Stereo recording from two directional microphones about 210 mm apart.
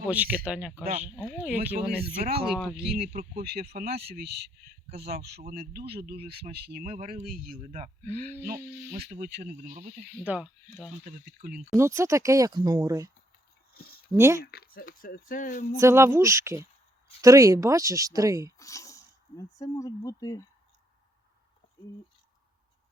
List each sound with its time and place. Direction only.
0.0 s speech: 5° right (ahead or behind)
2.0 s speech: 45° right (ahead or behind)
2.6 s speech: centre (ahead or behind)
2.8 s speech: 40° right (ahead or behind)
8.0 s speech: 10° left (ahead or behind)
8.9 s speech: 40° right (ahead or behind)
10.2 s speech: 5° right (ahead or behind)
11.0 s speech: 40° right (ahead or behind)
11.8 s speech: 15° right (ahead or behind)
13.7 s a sound: 45° left (ahead or behind)
14.1 s speech: 15° right (ahead or behind)
14.4 s speech: 50° left (ahead or behind)
15.8 s speech: 15° right (ahead or behind)
18.5 s speech: 15° left (ahead or behind)